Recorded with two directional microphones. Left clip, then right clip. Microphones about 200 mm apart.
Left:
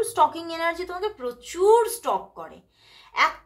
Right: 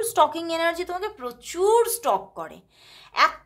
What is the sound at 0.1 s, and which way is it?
A woman's voice, 30° right (ahead or behind).